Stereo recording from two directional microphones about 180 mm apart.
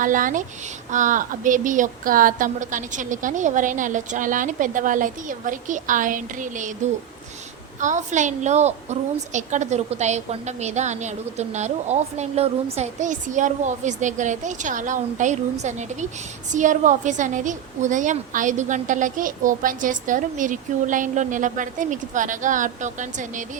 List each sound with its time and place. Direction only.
0.0 s a woman's voice: 45° right (ahead or behind)
7.8 s a woman's voice: 45° right (ahead or behind)